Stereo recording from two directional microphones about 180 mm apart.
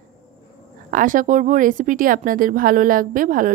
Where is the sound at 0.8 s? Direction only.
50° right (ahead or behind).